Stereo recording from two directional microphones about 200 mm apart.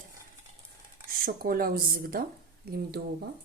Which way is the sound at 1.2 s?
45° right (ahead or behind).